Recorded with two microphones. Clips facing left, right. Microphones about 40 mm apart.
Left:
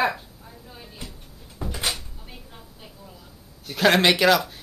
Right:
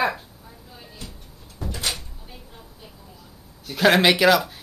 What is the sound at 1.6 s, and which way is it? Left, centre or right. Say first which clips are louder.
Cupboard open or close: even; centre.